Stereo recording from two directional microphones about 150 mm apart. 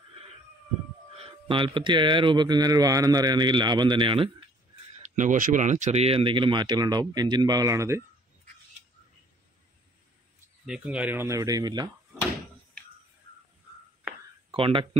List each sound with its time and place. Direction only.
1.1 s speech: 40° right (ahead or behind)
5.0 s speech: 55° right (ahead or behind); by 8.0 s 20° right (ahead or behind)
10.6 s speech: 5° right (ahead or behind); by 11.9 s 25° right (ahead or behind)
14.5 s speech: 35° right (ahead or behind)